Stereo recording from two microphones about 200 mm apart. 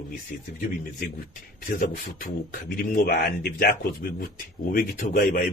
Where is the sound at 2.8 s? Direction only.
50° left (ahead or behind).